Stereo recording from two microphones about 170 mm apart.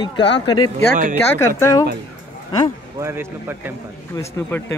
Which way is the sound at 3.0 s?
15° right (ahead or behind).